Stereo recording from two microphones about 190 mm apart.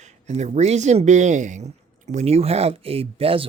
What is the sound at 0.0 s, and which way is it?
Speech, 35° right (ahead or behind).